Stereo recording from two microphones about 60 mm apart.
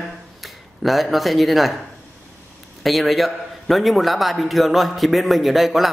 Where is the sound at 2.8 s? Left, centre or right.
Centre.